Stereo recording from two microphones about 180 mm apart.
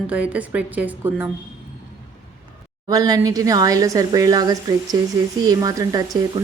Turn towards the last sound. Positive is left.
turn(degrees=-20)  # may be behind; listen again after turning